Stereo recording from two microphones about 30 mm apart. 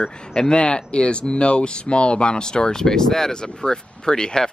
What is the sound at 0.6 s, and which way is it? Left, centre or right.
Speech, left.